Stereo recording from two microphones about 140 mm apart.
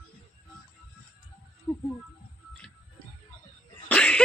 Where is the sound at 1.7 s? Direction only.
15° left (ahead or behind).